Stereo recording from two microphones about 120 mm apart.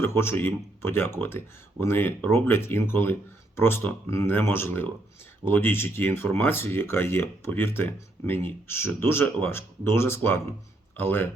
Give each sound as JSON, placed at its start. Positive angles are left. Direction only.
{"t": 0.2, "sound": "speech", "side_deg": 20}